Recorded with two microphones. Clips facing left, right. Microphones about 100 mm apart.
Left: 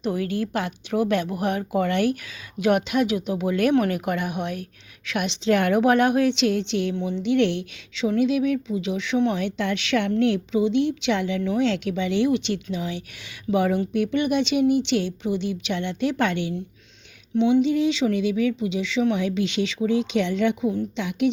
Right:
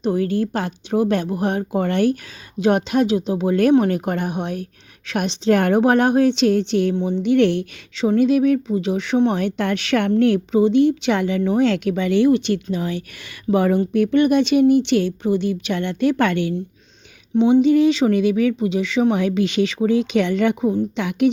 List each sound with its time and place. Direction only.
0.0 s speech: 30° right (ahead or behind)
6.9 s a woman's voice: 30° right (ahead or behind)
7.2 s speech: 50° right (ahead or behind)
17.3 s speech: 45° right (ahead or behind)